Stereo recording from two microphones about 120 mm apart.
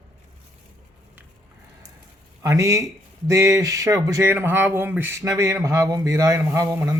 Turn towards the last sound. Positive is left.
turn(degrees=-25)  # may be behind; listen again after turning